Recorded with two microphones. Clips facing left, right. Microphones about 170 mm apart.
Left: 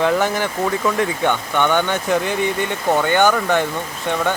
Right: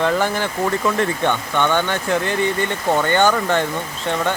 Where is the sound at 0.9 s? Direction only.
10° left (ahead or behind).